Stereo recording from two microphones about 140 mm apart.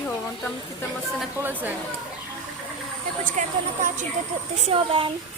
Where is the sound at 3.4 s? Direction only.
65° right (ahead or behind).